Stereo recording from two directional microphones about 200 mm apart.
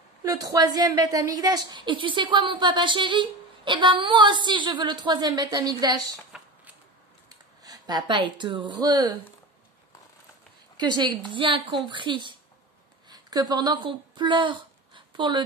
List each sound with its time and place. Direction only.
0.2 s a woman's voice: 15° right (ahead or behind)
6.3 s a sound: 5° right (ahead or behind)
7.2 s speech: 20° right (ahead or behind)
10.8 s a woman's voice: 20° right (ahead or behind)